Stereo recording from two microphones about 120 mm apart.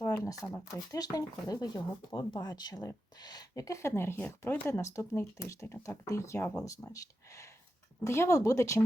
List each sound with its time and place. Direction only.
0.0 s a sound: 30° left (ahead or behind)
0.5 s speech: 30° left (ahead or behind)
8.0 s speech: 25° left (ahead or behind)